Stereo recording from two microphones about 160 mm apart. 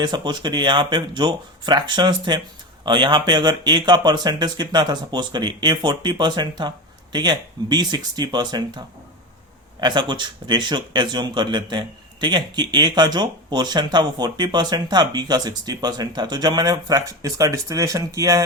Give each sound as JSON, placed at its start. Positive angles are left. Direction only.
{"t": 0.0, "sound": "speech", "side_deg": -30}
{"t": 9.8, "sound": "speech", "side_deg": -30}